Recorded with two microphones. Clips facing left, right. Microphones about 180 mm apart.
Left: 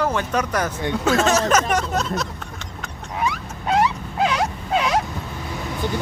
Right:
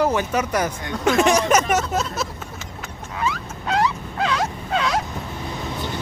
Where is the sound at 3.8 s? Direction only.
20° left (ahead or behind).